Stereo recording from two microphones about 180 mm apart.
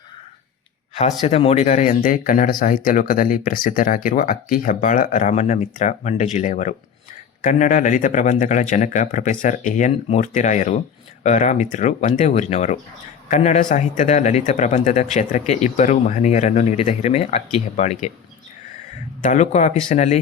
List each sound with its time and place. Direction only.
1.3 s speech: 35° left (ahead or behind)
19.2 s speech: 45° left (ahead or behind)